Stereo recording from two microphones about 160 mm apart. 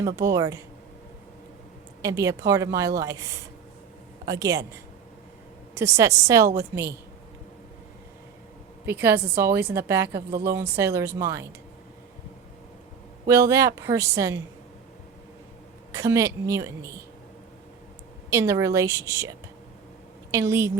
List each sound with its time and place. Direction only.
0.0 s a woman's voice: 20° right (ahead or behind)
2.0 s a woman's voice: 20° right (ahead or behind)
8.9 s speech: 15° right (ahead or behind)
13.2 s a woman's voice: 20° right (ahead or behind)
15.9 s a woman's voice: 20° right (ahead or behind)
18.3 s a woman's voice: 20° right (ahead or behind)